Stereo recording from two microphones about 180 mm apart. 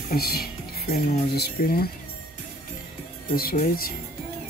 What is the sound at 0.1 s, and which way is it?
Speech, 60° left (ahead or behind).